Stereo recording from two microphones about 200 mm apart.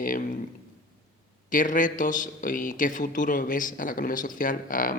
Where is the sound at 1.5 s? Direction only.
40° left (ahead or behind).